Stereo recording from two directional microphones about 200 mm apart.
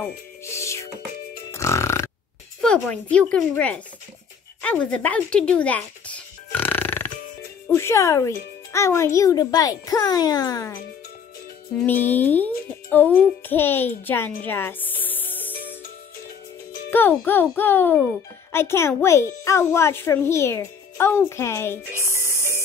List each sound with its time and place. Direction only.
0.4 s music: 15° left (ahead or behind)
2.6 s speech: 5° left (ahead or behind)
4.6 s a sound: 5° left (ahead or behind)
7.7 s a child's voice: 15° left (ahead or behind)
11.8 s a child's voice: 10° left (ahead or behind)
16.9 s a child's voice: 10° left (ahead or behind)